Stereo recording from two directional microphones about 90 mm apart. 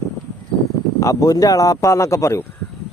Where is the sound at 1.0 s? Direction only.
40° left (ahead or behind).